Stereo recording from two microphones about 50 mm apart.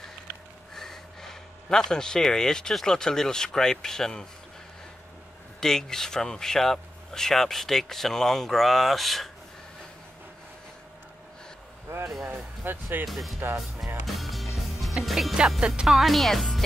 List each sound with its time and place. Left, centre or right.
0.7 s speech: centre
5.6 s speech: centre
12.6 s speech: right
13.0 s speech: centre
14.0 s music: centre
15.6 s speech: centre
15.9 s speech: centre